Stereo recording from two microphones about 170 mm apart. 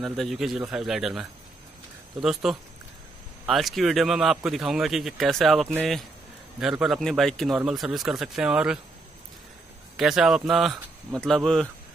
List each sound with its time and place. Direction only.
0.0 s speech: centre (ahead or behind)
9.9 s speech: 5° right (ahead or behind)